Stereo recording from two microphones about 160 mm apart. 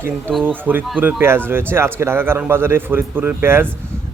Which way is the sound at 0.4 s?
10° right (ahead or behind).